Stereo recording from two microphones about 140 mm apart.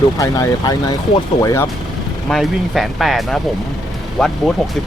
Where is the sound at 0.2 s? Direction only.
25° left (ahead or behind).